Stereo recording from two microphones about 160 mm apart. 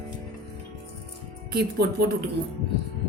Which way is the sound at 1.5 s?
90° right.